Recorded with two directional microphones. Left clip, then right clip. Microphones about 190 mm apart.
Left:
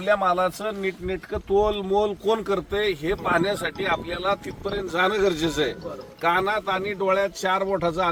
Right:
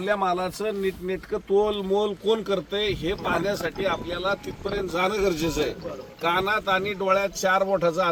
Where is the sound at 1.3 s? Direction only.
5° left (ahead or behind).